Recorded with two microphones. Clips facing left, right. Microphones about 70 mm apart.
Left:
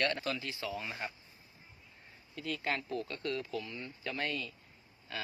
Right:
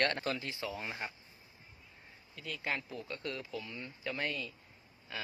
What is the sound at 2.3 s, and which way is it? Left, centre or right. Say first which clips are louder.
Speech: left 3 dB; centre.